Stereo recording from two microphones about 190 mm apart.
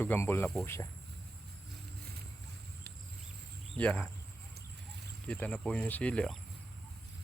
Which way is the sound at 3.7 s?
5° left (ahead or behind).